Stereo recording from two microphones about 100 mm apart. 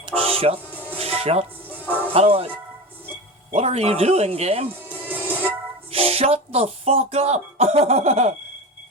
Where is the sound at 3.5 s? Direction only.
90° right.